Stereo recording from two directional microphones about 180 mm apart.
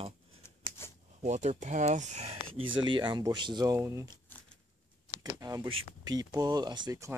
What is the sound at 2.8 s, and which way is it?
Speech, 25° right (ahead or behind).